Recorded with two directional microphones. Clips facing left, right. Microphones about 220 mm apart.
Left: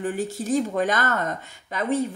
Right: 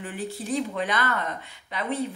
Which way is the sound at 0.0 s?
45° left (ahead or behind).